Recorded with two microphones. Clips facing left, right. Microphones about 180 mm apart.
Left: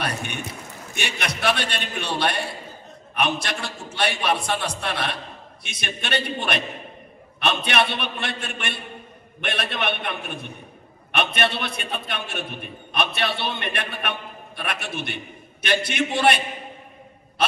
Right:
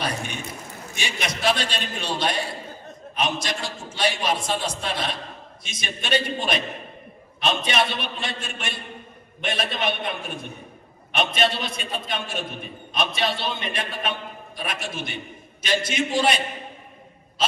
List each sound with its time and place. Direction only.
0.9 s a man's voice: 60° left (ahead or behind)